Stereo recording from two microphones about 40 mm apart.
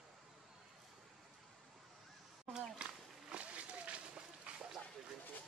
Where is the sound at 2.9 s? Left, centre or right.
Right.